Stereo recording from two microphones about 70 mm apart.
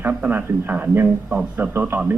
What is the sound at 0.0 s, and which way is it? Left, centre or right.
A man's voice, right.